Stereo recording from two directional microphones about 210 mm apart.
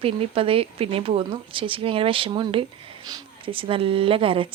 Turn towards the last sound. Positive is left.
turn(degrees=-25)  # may be behind; listen again after turning